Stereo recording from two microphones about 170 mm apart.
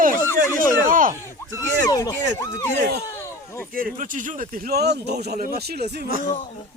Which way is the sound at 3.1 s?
15° left (ahead or behind).